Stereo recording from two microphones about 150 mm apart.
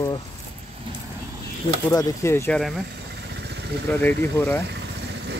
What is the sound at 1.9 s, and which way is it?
Speech, 25° left (ahead or behind).